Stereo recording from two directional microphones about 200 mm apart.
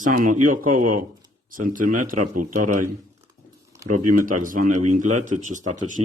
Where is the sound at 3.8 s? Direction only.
40° right (ahead or behind).